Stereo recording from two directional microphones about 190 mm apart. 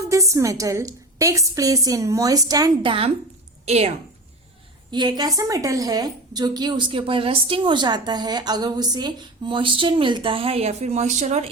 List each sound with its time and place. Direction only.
0.1 s a woman's voice: 15° right (ahead or behind); by 3.9 s 35° right (ahead or behind)
4.9 s a woman's voice: 20° right (ahead or behind); by 11.4 s 40° right (ahead or behind)